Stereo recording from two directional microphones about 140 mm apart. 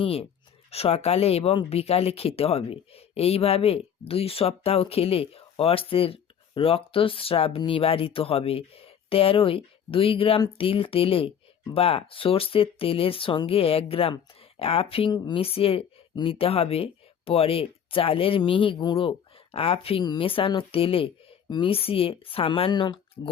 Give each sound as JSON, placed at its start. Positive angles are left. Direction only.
{"t": 0.0, "sound": "speech", "side_deg": 45}